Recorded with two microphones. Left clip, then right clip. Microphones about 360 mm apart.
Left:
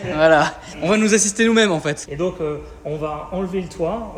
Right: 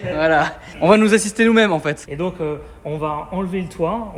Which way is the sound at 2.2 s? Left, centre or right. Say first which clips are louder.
Left 1 dB; centre.